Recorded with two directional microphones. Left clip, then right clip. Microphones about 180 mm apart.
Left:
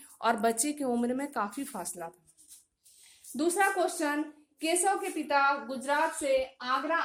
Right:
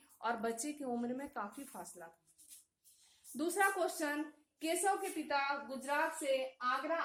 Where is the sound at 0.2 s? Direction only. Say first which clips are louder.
Left 10 dB; 40° left (ahead or behind).